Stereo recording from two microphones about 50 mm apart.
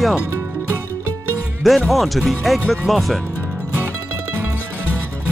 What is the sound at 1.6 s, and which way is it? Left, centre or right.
Speech, centre.